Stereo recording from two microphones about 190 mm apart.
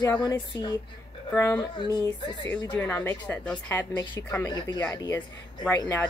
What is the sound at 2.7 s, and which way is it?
Speech, 10° left (ahead or behind).